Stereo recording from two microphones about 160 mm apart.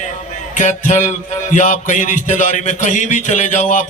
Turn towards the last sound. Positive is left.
turn(degrees=50)  # may be behind; listen again after turning